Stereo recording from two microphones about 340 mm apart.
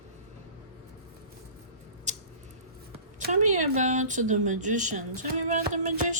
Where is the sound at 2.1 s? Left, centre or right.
Right.